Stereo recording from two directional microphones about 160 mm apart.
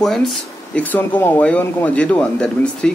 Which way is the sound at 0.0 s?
Centre (ahead or behind).